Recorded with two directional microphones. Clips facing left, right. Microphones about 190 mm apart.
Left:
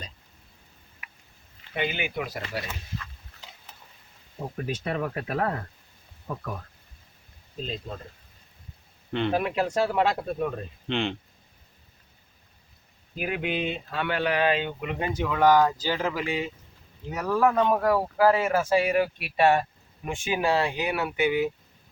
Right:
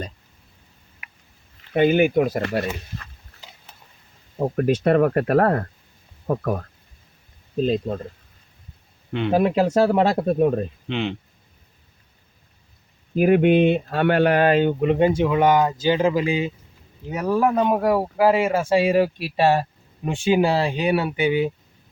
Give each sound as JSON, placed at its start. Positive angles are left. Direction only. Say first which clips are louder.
{"t": 1.7, "sound": "speech", "louder": "right 13 dB", "side_deg": -45}
{"t": 4.4, "sound": "speech", "louder": "right 12 dB", "side_deg": -60}
{"t": 9.3, "sound": "speech", "louder": "right 10 dB", "side_deg": -35}
{"t": 10.8, "sound": "speech", "louder": "left 2 dB", "side_deg": -5}
{"t": 13.1, "sound": "speech", "louder": "right 14 dB", "side_deg": -50}